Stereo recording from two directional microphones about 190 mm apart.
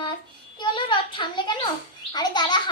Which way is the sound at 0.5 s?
25° left (ahead or behind).